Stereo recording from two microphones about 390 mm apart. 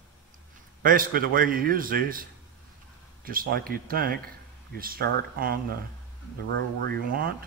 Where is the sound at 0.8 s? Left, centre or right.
Right.